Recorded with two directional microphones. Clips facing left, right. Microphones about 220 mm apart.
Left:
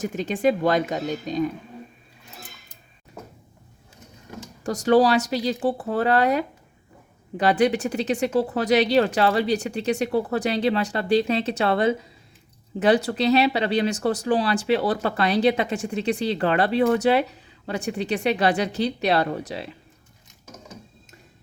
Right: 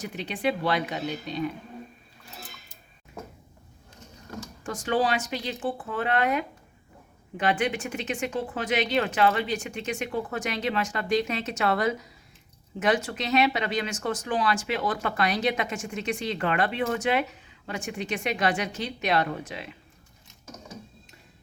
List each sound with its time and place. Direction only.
0.0 s speech: 45° left (ahead or behind)
4.6 s speech: 40° left (ahead or behind)